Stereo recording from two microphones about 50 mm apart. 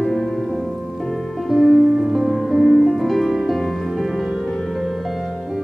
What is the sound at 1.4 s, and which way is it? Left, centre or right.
Music, centre.